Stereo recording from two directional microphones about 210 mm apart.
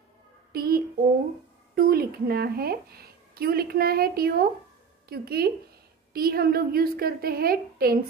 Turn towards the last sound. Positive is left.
turn(degrees=-45)  # may be behind; listen again after turning